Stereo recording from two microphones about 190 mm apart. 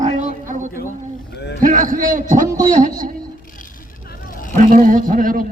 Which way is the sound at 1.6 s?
45° right (ahead or behind).